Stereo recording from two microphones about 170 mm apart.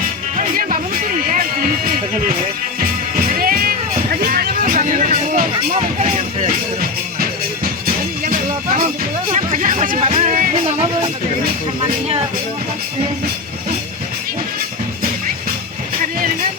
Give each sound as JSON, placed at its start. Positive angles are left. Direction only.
{"t": 0.3, "sound": "music", "side_deg": -55}
{"t": 3.3, "sound": "music", "side_deg": -60}
{"t": 6.0, "sound": "a sound", "side_deg": -45}
{"t": 8.2, "sound": "music", "side_deg": -55}
{"t": 10.5, "sound": "music", "side_deg": -40}